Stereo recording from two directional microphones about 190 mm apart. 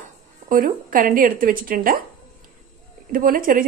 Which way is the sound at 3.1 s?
50° right (ahead or behind).